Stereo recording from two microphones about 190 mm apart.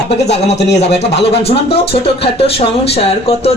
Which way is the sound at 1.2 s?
30° left (ahead or behind).